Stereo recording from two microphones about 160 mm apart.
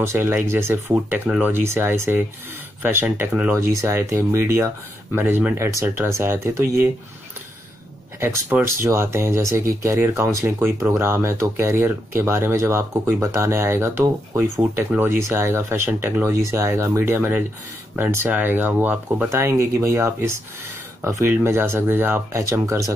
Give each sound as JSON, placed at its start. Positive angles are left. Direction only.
{"t": 0.0, "sound": "speech", "side_deg": -15}
{"t": 8.2, "sound": "speech", "side_deg": -15}